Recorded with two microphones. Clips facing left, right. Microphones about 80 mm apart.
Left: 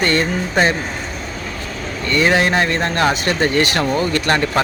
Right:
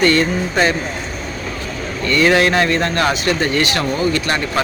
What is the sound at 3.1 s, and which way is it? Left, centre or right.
Speech, left.